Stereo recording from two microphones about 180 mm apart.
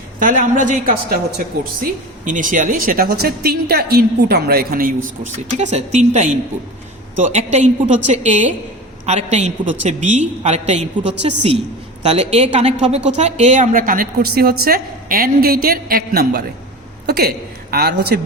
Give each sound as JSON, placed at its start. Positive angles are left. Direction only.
{"t": 0.2, "sound": "a woman's voice", "side_deg": -45}
{"t": 5.7, "sound": "a woman's voice", "side_deg": -40}